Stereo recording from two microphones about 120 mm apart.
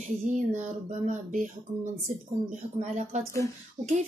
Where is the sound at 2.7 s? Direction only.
75° right (ahead or behind).